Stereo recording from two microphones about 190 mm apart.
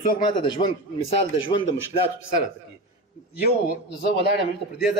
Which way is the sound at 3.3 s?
55° left (ahead or behind).